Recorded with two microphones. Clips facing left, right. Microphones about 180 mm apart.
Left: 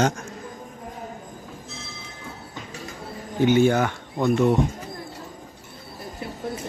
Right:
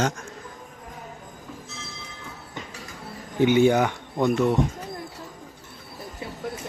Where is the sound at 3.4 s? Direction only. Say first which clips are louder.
Even; 15° right (ahead or behind).